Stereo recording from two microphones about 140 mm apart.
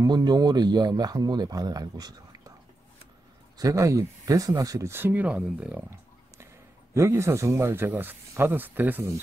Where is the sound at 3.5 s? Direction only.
25° right (ahead or behind).